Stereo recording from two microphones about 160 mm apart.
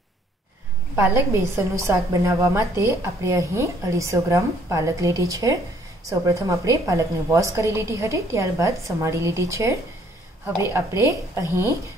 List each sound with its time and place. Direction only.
0.9 s a woman's voice: 15° right (ahead or behind)